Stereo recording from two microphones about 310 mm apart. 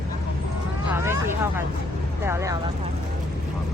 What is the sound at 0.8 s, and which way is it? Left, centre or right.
Speech, centre.